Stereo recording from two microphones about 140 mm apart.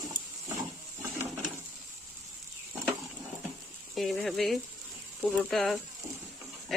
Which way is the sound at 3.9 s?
Centre (ahead or behind).